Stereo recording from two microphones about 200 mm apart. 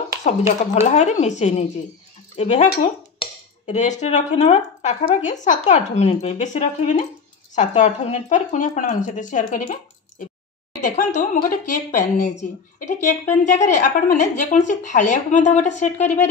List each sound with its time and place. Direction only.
0.3 s speech: 40° left (ahead or behind)